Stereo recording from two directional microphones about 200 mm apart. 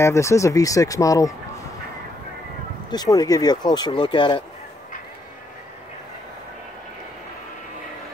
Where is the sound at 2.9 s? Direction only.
20° left (ahead or behind).